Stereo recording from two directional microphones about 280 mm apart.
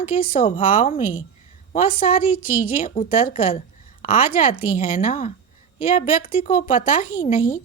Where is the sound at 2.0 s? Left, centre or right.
Left.